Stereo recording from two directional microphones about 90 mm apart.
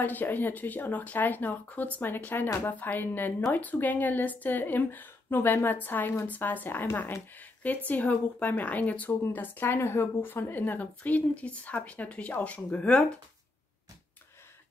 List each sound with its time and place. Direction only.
0.0 s a woman's voice: 20° left (ahead or behind)